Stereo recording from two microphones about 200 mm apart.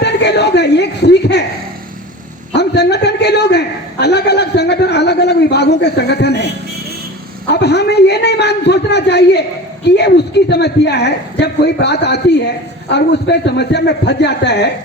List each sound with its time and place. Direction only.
0.0 s speech: 60° left (ahead or behind)
2.5 s a sound: 55° left (ahead or behind)
7.5 s a woman's voice: 55° left (ahead or behind)